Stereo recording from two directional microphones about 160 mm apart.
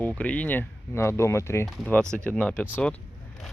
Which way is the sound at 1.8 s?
5° left (ahead or behind).